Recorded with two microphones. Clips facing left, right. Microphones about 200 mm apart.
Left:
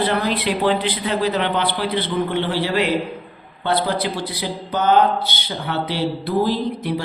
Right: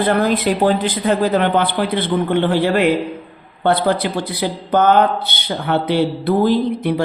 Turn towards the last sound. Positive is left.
turn(degrees=-55)  # may be behind; listen again after turning